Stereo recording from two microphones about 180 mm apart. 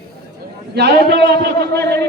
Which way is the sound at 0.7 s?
65° right (ahead or behind).